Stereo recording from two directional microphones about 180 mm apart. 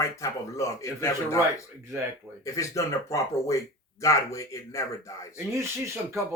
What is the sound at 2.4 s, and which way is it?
Speech, 15° left (ahead or behind).